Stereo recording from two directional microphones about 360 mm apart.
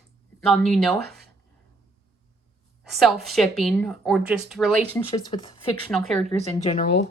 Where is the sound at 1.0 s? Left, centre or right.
Right.